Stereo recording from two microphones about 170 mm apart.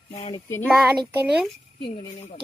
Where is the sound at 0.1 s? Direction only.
40° left (ahead or behind).